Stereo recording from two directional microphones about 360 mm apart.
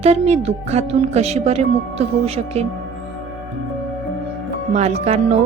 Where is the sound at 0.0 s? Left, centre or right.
Centre.